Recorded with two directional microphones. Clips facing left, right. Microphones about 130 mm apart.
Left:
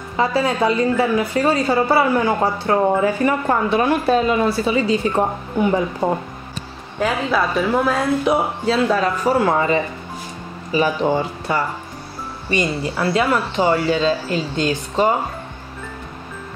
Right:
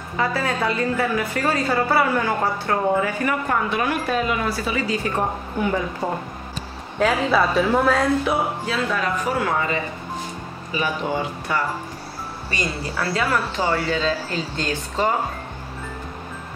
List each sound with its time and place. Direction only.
0.2 s a woman's voice: 20° left (ahead or behind)
7.0 s a woman's voice: centre (ahead or behind)
8.6 s a man's voice: 30° left (ahead or behind)